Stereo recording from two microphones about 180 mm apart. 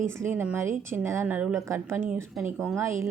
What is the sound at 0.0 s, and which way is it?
A woman's voice, 15° right (ahead or behind).